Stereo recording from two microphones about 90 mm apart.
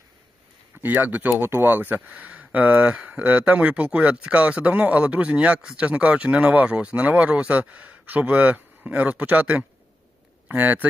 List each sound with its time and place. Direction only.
0.8 s speech: 20° right (ahead or behind)